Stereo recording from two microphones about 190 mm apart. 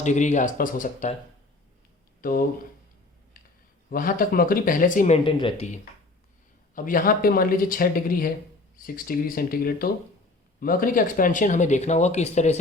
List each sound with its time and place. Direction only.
0.0 s speech: 40° left (ahead or behind)
2.2 s speech: 45° left (ahead or behind)
3.8 s speech: 45° left (ahead or behind)
6.7 s speech: 45° left (ahead or behind)